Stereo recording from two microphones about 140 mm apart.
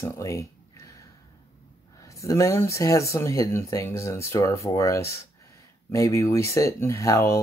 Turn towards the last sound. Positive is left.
turn(degrees=20)  # may be behind; listen again after turning